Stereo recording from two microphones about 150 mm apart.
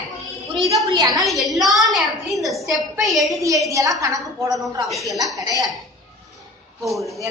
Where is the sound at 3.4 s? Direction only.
20° right (ahead or behind).